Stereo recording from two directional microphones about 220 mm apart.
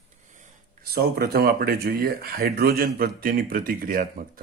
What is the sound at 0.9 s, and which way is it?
Speech, 45° right (ahead or behind).